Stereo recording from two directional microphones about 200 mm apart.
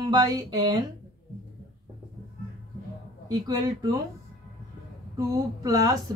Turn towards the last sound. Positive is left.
turn(degrees=-15)  # may be behind; listen again after turning